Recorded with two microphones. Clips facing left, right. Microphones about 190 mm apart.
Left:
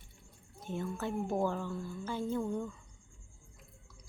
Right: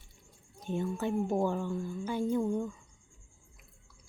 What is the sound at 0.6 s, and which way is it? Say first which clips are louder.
A woman's voice: right 4 dB; 20° right (ahead or behind).